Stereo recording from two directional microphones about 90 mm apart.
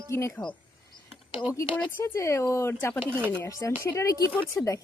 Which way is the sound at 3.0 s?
25° right (ahead or behind).